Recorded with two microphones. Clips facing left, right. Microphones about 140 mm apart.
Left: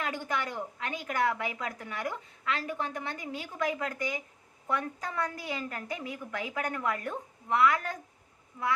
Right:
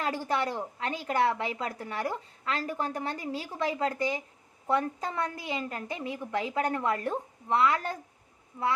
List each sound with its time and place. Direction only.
0.0 s a woman's voice: 35° right (ahead or behind)